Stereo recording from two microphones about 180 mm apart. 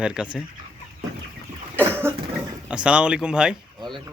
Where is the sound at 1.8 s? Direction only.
10° right (ahead or behind).